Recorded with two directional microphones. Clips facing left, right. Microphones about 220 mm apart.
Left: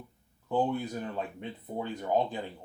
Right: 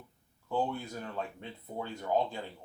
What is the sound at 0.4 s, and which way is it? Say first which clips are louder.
Speech: left 4 dB; 20° left (ahead or behind).